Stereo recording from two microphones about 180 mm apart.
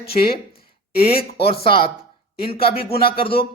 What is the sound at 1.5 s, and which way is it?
A man's voice, 30° left (ahead or behind).